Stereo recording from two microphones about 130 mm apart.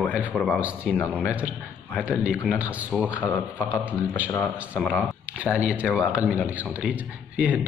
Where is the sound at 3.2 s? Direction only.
15° left (ahead or behind).